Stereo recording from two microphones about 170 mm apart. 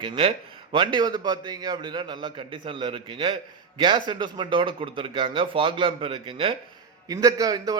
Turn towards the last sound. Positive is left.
turn(degrees=-20)  # may be behind; listen again after turning